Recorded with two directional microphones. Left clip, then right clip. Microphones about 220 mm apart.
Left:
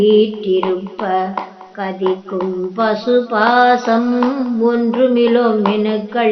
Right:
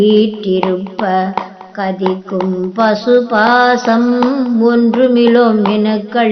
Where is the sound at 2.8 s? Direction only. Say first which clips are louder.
Right 4 dB; 20° right (ahead or behind).